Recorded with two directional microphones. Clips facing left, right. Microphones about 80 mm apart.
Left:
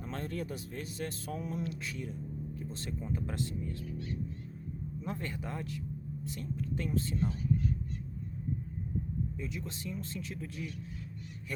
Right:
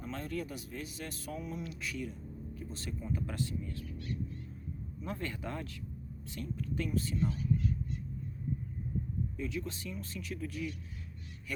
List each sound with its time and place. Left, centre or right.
0.0 s speech: left; by 5.8 s centre
6.4 s speech: left
9.4 s speech: left